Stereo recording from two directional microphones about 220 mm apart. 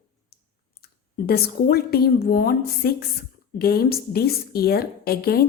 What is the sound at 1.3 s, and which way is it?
A woman's voice, 45° left (ahead or behind).